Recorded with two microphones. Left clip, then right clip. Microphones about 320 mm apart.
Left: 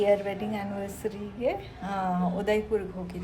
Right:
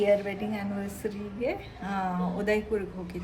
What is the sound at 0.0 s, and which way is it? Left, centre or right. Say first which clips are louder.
A woman's voice: even; centre.